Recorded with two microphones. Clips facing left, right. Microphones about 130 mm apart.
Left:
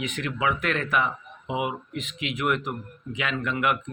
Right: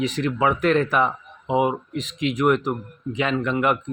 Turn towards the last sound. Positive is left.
turn(degrees=-35)  # may be behind; listen again after turning